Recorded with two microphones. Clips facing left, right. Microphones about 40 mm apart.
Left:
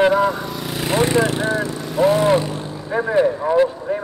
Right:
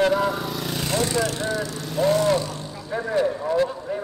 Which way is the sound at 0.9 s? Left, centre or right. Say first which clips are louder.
Left 7 dB; left.